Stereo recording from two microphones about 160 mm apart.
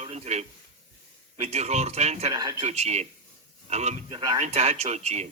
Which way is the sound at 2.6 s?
45° right (ahead or behind).